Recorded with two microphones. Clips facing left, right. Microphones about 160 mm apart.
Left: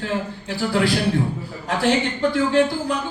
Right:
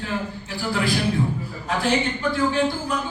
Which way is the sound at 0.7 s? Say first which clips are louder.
Left 3 dB; 75° left (ahead or behind).